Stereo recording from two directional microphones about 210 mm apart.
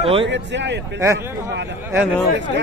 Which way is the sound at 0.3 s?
55° right (ahead or behind).